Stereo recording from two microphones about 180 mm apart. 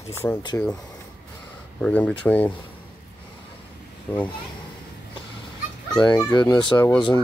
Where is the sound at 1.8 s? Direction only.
5° left (ahead or behind).